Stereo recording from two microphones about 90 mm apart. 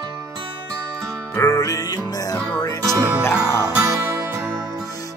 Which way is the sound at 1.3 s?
35° left (ahead or behind).